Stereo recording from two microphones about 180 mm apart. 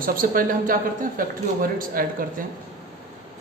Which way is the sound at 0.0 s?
50° right (ahead or behind).